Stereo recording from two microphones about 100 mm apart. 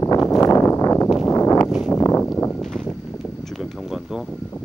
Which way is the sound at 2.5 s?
5° left (ahead or behind).